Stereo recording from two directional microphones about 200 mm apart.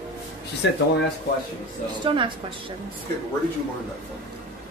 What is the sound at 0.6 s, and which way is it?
Speech, 60° left (ahead or behind).